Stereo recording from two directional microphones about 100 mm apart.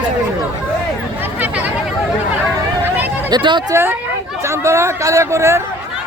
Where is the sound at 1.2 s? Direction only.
15° right (ahead or behind).